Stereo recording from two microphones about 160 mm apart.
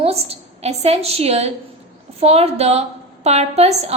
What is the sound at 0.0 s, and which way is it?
A woman's voice, 40° right (ahead or behind).